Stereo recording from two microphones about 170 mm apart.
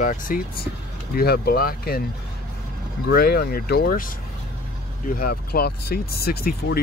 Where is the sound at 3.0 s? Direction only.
65° left (ahead or behind).